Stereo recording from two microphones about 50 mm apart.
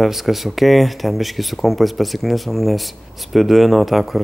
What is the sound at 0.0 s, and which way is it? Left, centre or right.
Speech, centre.